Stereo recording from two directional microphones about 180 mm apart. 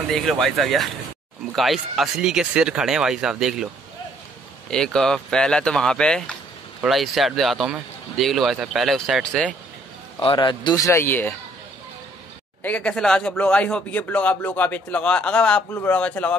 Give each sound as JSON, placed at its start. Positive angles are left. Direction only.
{"t": 0.1, "sound": "speech", "side_deg": 0}
{"t": 4.6, "sound": "speech", "side_deg": 5}
{"t": 10.2, "sound": "a man's voice", "side_deg": 25}
{"t": 12.6, "sound": "a man's voice", "side_deg": 5}